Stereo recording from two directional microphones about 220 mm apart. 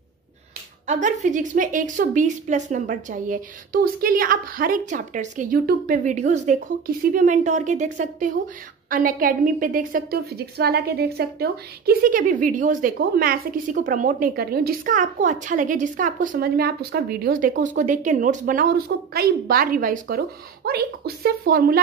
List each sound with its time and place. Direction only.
0.8 s a woman's voice: 35° right (ahead or behind)